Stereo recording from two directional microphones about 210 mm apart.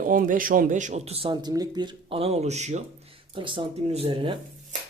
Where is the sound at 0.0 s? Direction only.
40° right (ahead or behind).